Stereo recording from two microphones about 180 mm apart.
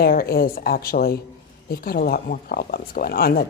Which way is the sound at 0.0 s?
55° left (ahead or behind).